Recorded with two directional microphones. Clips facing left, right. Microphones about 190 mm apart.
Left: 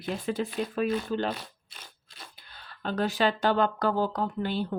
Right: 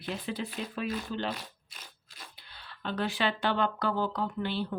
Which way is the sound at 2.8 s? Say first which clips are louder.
Left 4 dB; 40° left (ahead or behind).